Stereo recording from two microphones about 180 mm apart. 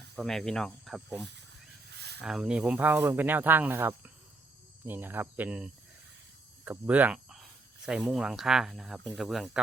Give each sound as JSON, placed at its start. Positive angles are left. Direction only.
{"t": 0.2, "sound": "speech", "side_deg": 0}
{"t": 1.9, "sound": "a sound", "side_deg": -65}
{"t": 2.2, "sound": "speech", "side_deg": -5}